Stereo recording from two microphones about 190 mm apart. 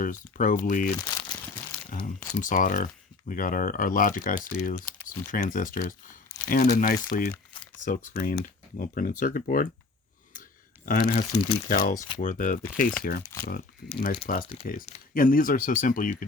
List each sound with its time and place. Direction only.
0.0 s speech: 45° left (ahead or behind)
0.9 s crumpling: 20° left (ahead or behind)
1.9 s speech: 45° left (ahead or behind)
10.8 s speech: 50° left (ahead or behind)
11.3 s speech: 30° left (ahead or behind)
11.7 s speech: 45° left (ahead or behind)
14.3 s speech: 45° left (ahead or behind)